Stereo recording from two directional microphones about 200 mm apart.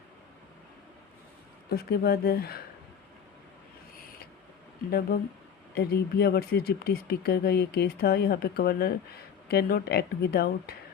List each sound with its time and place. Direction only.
1.7 s speech: 50° left (ahead or behind)
4.9 s speech: 50° left (ahead or behind)